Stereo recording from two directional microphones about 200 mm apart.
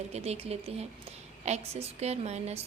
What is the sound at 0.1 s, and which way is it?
A woman's voice, 30° right (ahead or behind).